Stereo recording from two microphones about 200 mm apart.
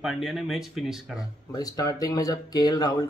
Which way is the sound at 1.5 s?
20° left (ahead or behind).